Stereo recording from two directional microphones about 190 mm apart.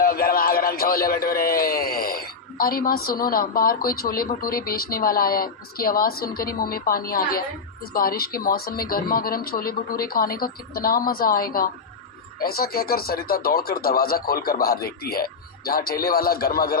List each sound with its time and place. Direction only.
0.0 s speech: 50° left (ahead or behind)